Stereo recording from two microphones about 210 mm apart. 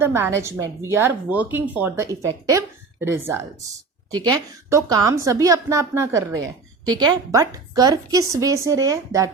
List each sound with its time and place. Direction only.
0.0 s a woman's voice: 10° right (ahead or behind)